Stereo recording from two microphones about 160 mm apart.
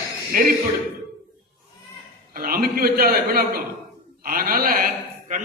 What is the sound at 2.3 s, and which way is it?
A man's voice, 65° right (ahead or behind).